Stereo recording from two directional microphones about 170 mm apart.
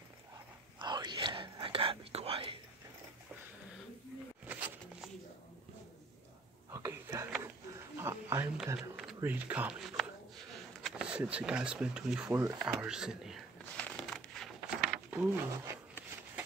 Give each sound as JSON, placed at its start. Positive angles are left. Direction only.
{"t": 0.7, "sound": "whispering", "side_deg": -25}
{"t": 4.5, "sound": "a sound", "side_deg": -10}
{"t": 6.7, "sound": "a sound", "side_deg": -20}
{"t": 8.9, "sound": "speech", "side_deg": -5}
{"t": 12.3, "sound": "speech", "side_deg": -20}
{"t": 12.5, "sound": "crumpling", "side_deg": -5}